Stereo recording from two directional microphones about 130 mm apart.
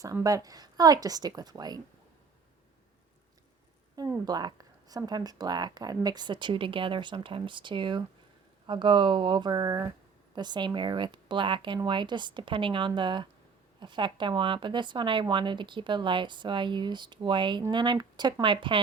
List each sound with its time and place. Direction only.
0.0 s a woman's voice: 25° right (ahead or behind)
4.3 s speech: 30° right (ahead or behind)